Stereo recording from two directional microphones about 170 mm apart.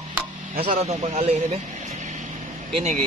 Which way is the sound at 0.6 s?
40° right (ahead or behind).